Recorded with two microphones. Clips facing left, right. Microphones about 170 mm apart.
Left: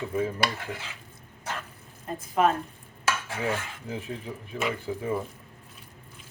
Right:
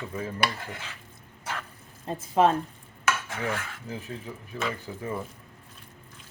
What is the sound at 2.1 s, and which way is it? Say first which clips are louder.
Speech: right 2 dB; 25° right (ahead or behind).